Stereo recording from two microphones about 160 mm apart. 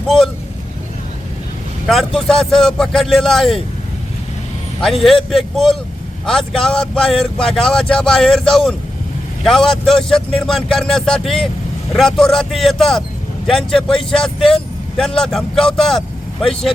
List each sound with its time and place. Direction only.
1.9 s speech: centre (ahead or behind)
4.8 s speech: centre (ahead or behind)